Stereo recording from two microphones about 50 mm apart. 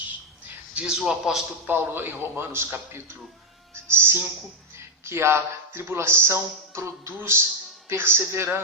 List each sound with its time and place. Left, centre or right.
0.0 s a sound: right
0.9 s a man's voice: centre
1.6 s a man's voice: right